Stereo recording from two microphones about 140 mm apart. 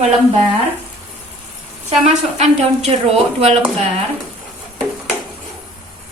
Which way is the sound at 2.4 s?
50° right (ahead or behind).